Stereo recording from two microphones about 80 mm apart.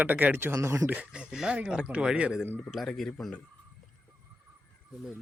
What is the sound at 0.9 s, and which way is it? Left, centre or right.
Speech, centre.